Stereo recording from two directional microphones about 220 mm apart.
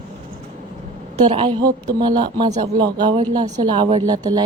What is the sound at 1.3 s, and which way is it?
A woman's voice, 20° right (ahead or behind).